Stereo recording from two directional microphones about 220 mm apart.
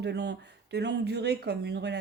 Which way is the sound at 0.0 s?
50° right (ahead or behind).